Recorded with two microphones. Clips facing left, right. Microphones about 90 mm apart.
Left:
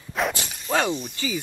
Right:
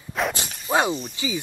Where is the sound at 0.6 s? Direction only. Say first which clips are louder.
Right 2 dB; 5° right (ahead or behind).